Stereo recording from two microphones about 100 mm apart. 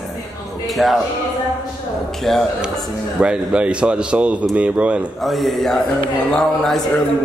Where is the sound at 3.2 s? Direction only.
10° right (ahead or behind).